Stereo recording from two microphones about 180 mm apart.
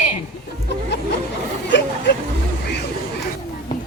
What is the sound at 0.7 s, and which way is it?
Music, 75° left (ahead or behind).